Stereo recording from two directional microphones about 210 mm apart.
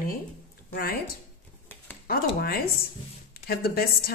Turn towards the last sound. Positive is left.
turn(degrees=45)  # may be behind; listen again after turning